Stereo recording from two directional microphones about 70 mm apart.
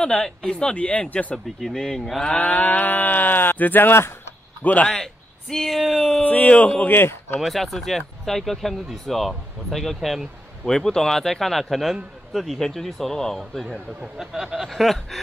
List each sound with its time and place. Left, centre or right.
0.0 s speech: centre
2.3 s speech: left
4.8 s speech: centre
6.2 s speech: left
7.3 s speech: centre